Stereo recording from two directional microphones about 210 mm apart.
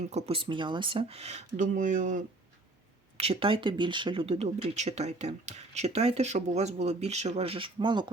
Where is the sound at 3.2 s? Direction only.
25° right (ahead or behind).